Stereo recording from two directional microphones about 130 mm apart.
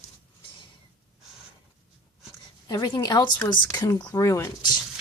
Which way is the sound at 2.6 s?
35° left (ahead or behind).